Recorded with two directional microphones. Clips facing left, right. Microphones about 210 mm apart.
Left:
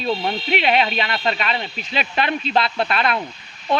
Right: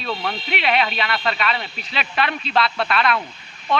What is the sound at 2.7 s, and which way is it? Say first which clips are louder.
Speech: even; 25° left (ahead or behind).